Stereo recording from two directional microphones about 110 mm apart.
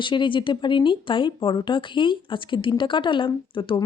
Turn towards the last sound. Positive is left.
turn(degrees=50)  # may be behind; listen again after turning